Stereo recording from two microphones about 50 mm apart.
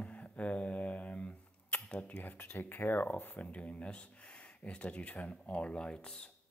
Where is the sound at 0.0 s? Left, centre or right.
Left.